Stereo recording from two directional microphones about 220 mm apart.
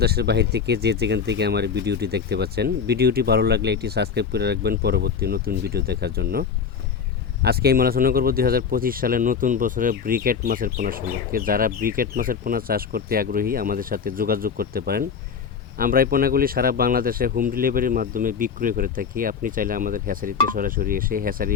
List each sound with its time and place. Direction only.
0.0 s speech: 45° right (ahead or behind)
7.4 s speech: 45° right (ahead or behind)